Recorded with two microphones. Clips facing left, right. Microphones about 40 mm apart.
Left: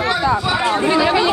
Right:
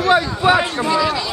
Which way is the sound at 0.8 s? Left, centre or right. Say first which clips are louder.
Left 3 dB; left.